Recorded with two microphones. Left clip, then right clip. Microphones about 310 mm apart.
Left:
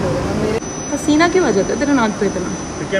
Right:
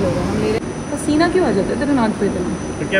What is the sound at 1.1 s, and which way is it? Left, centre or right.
Speech, centre.